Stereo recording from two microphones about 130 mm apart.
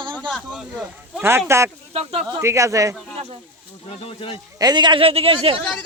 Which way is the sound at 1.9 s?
50° right (ahead or behind).